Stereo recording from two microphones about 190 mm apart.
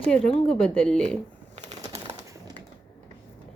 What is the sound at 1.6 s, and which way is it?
Bird, 25° right (ahead or behind).